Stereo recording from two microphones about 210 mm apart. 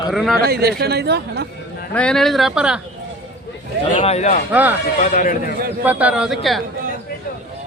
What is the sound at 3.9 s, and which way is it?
Speech, 30° left (ahead or behind).